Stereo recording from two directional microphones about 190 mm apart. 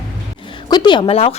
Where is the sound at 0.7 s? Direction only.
25° left (ahead or behind).